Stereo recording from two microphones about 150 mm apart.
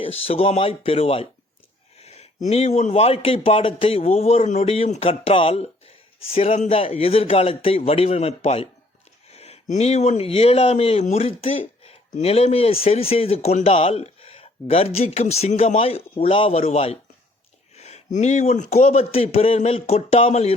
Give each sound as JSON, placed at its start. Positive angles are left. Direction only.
{"t": 0.0, "sound": "a man's voice", "side_deg": 40}